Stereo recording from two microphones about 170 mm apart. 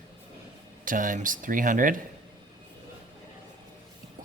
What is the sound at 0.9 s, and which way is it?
Speech, 50° right (ahead or behind).